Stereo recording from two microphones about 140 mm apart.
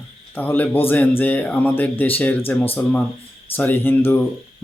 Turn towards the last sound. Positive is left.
turn(degrees=15)  # may be behind; listen again after turning